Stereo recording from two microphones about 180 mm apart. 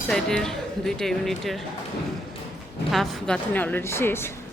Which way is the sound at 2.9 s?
Centre (ahead or behind).